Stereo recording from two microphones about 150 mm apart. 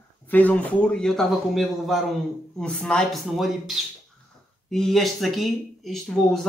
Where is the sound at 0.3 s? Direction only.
10° left (ahead or behind).